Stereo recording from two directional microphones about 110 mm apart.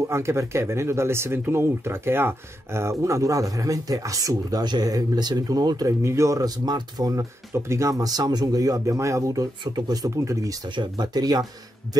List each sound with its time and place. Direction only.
0.0 s speech: 25° right (ahead or behind)
10.7 s speech: 40° right (ahead or behind)